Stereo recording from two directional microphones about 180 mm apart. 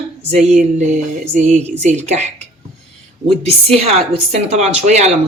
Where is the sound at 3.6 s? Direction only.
35° right (ahead or behind).